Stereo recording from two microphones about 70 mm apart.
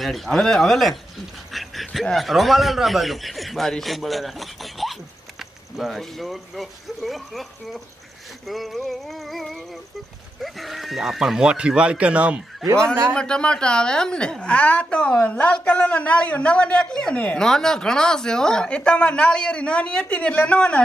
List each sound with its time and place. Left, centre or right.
0.0 s a man's voice: centre
1.5 s a sound: centre
2.0 s a man's voice: centre
13.1 s speech: centre